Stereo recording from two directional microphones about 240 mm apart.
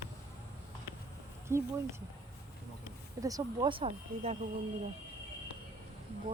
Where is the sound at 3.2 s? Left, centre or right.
Centre.